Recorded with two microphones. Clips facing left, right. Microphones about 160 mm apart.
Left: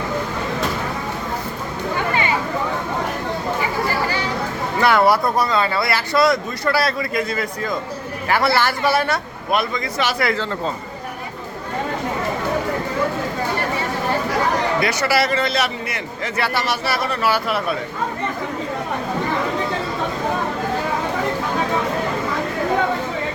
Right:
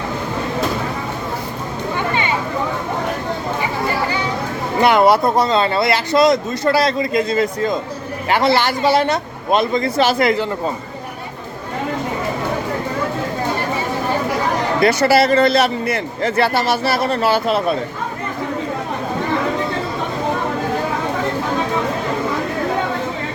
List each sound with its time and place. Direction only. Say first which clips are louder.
4.8 s speech: right 3 dB; 20° right (ahead or behind)
14.8 s a man's voice: right 6 dB; 30° right (ahead or behind)